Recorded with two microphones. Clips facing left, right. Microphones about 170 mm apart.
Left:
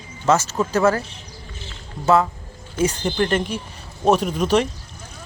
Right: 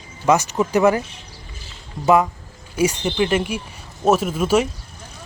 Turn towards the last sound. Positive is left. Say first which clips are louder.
# right 1 dB
turn(degrees=-5)  # may be behind; listen again after turning